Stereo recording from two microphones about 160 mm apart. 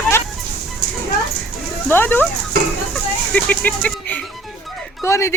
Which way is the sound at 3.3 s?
10° left (ahead or behind).